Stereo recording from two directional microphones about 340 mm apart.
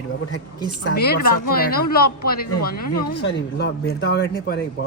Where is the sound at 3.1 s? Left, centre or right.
Left.